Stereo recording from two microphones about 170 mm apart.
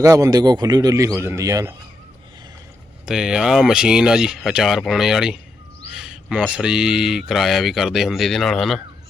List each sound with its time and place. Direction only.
0.0 s a man's voice: 20° right (ahead or behind)
3.1 s speech: 5° right (ahead or behind)